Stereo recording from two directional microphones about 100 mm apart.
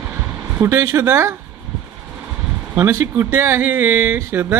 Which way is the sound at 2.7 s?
25° right (ahead or behind).